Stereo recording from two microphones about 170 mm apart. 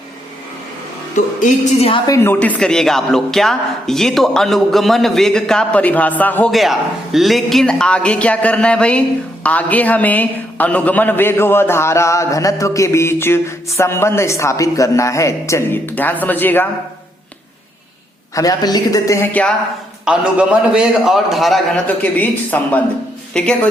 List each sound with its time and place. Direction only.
1.4 s a woman's voice: 45° left (ahead or behind)
1.9 s a woman's voice: 20° left (ahead or behind)
6.5 s a man's voice: centre (ahead or behind)
18.3 s a woman's voice: 20° left (ahead or behind)
20.1 s a woman's voice: 5° right (ahead or behind)